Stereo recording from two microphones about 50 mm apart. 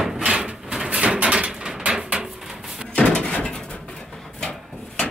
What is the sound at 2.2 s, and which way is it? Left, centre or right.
Bird, centre.